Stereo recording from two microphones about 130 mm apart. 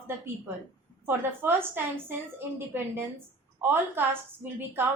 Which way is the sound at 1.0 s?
15° right (ahead or behind).